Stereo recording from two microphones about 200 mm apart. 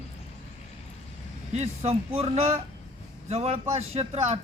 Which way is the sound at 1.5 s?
30° right (ahead or behind).